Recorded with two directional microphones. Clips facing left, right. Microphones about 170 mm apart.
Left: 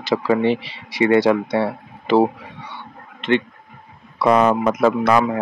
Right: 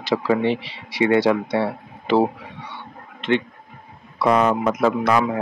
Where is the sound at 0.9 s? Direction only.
45° left (ahead or behind).